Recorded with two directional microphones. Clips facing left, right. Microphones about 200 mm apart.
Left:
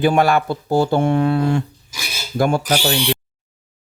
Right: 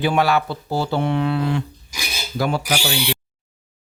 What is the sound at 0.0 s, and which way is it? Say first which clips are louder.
Speech: left 3 dB; 50° left (ahead or behind).